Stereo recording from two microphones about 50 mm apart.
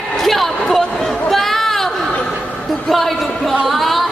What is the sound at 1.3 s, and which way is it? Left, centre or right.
Chatter, centre.